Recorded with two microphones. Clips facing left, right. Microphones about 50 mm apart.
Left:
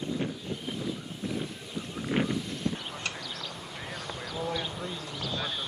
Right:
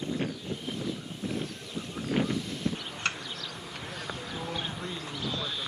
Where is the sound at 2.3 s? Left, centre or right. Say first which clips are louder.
Even; centre.